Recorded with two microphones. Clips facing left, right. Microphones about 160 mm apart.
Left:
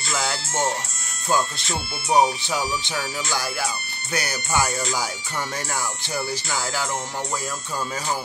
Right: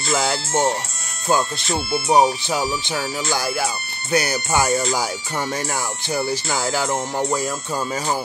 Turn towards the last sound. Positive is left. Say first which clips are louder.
# right 7 dB
turn(degrees=-45)  # may be behind; listen again after turning